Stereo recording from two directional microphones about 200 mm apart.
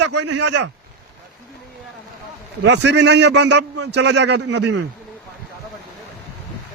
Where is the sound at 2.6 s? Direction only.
60° right (ahead or behind).